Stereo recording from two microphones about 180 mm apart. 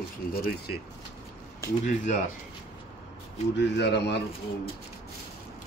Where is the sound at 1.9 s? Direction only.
40° left (ahead or behind).